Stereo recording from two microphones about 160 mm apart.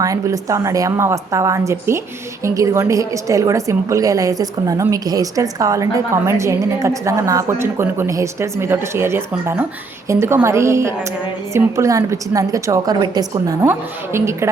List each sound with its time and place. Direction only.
0.0 s a woman's voice: 20° right (ahead or behind)